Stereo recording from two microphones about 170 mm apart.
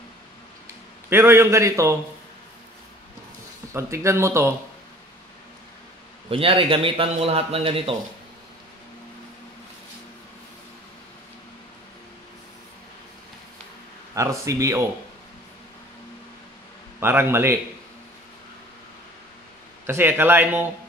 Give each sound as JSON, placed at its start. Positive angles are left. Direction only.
{"t": 1.1, "sound": "a man's voice", "side_deg": -15}
{"t": 3.7, "sound": "a man's voice", "side_deg": -15}
{"t": 6.3, "sound": "a man's voice", "side_deg": -30}
{"t": 14.1, "sound": "a man's voice", "side_deg": -15}
{"t": 17.0, "sound": "a man's voice", "side_deg": -15}
{"t": 19.9, "sound": "a man's voice", "side_deg": -15}